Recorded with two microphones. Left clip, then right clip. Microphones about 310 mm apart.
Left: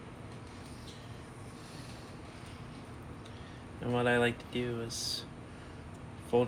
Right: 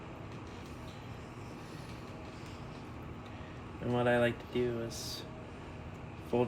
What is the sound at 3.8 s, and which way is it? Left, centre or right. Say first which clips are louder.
Speech: left 1 dB; centre.